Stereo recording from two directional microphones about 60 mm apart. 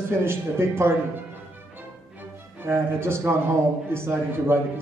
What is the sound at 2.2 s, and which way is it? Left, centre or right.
Music, right.